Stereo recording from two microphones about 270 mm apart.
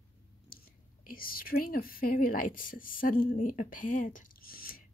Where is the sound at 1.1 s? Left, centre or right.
Left.